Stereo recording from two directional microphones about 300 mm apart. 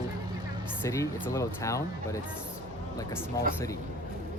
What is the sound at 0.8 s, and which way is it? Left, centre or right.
Speech, centre.